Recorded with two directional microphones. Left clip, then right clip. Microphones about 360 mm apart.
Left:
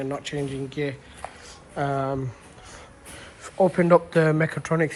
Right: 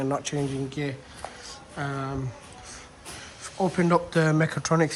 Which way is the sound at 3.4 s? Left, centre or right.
Centre.